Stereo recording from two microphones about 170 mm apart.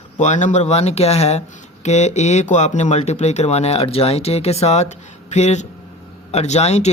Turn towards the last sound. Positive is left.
turn(degrees=40)  # may be behind; listen again after turning